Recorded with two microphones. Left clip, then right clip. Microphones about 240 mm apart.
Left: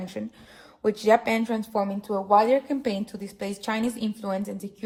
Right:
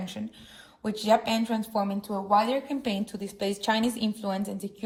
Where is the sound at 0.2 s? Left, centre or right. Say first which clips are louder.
Left 4 dB; left.